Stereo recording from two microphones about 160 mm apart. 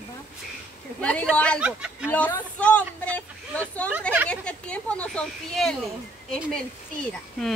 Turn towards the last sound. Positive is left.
turn(degrees=5)  # may be behind; listen again after turning